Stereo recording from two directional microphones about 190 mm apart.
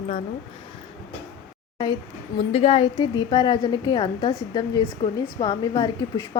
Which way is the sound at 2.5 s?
30° left (ahead or behind).